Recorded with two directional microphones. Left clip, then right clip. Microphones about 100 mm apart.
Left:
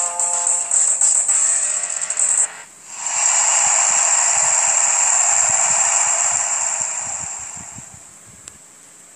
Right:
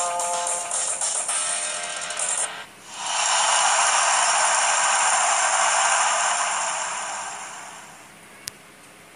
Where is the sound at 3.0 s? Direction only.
75° left (ahead or behind).